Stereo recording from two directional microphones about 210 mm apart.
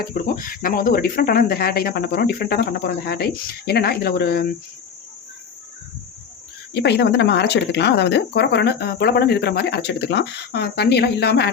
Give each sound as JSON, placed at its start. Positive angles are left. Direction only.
{"t": 0.0, "sound": "speech", "side_deg": 45}
{"t": 6.7, "sound": "speech", "side_deg": 50}